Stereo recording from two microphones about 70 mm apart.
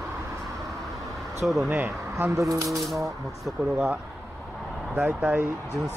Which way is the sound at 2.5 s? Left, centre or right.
Right.